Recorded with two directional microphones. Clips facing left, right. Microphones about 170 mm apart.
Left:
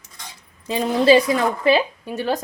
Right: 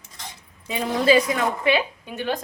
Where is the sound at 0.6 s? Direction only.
30° left (ahead or behind).